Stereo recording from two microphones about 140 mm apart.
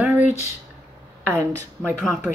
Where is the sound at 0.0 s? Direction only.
10° right (ahead or behind).